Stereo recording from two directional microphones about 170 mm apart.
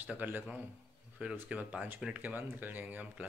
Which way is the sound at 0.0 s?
10° right (ahead or behind).